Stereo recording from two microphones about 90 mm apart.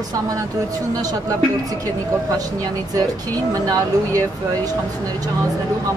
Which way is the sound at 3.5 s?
40° right (ahead or behind).